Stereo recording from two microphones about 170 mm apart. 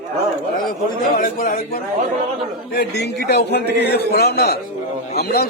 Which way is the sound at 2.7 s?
75° left (ahead or behind).